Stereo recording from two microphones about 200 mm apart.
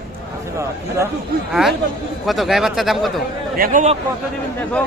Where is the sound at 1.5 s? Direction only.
Centre (ahead or behind).